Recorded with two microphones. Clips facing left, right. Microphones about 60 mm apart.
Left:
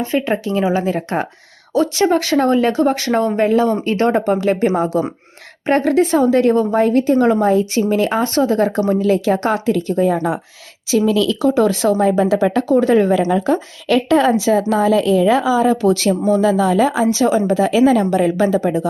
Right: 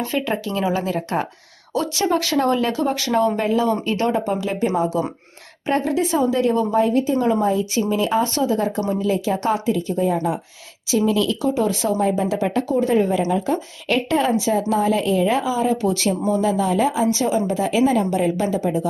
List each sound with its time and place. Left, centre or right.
0.0 s a woman's voice: left
10.9 s a woman's voice: left
13.5 s a woman's voice: left